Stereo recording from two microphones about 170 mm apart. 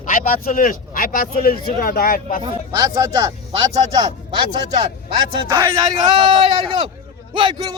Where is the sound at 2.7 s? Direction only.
20° right (ahead or behind).